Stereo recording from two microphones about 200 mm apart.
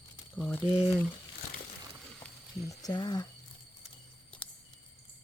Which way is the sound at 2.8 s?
20° left (ahead or behind).